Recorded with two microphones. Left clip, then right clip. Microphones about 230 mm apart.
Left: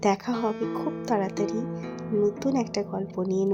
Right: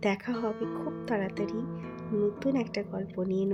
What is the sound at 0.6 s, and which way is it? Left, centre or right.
Speech, left.